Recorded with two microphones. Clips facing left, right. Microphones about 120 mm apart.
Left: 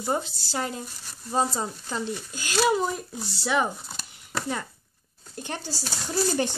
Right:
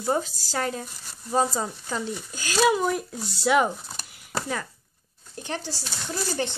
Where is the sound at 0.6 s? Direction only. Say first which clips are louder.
Right 2 dB; 20° left (ahead or behind).